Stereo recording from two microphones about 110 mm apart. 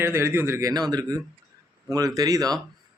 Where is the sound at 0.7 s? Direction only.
35° right (ahead or behind).